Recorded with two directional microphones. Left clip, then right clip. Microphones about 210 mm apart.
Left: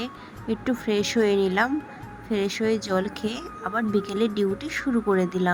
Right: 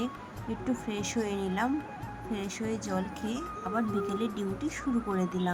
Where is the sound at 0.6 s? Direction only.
20° left (ahead or behind).